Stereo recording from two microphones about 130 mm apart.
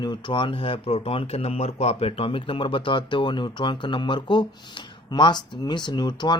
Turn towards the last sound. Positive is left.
turn(degrees=35)  # may be behind; listen again after turning